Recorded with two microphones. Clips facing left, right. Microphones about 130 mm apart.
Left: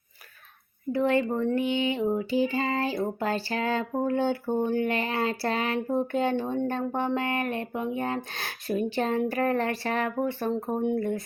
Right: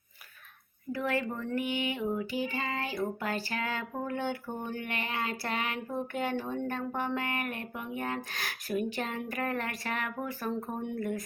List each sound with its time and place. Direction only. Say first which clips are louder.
0.9 s speech: left 8 dB; 25° left (ahead or behind)